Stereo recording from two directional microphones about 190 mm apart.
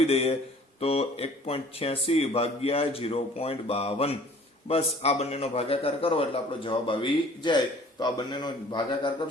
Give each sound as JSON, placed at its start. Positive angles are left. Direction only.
{"t": 0.1, "sound": "a man's voice", "side_deg": 30}